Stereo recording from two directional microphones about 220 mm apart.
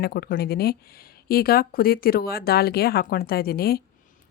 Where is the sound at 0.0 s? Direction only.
45° left (ahead or behind).